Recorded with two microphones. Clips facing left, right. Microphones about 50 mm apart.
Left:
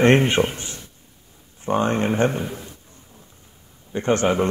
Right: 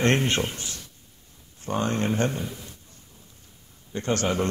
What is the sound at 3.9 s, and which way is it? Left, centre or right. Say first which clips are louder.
Speech: left 6 dB; left.